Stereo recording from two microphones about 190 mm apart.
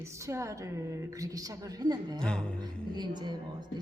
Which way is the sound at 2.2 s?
5° left (ahead or behind).